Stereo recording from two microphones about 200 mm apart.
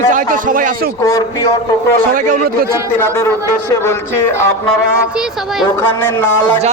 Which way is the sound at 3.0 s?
10° left (ahead or behind).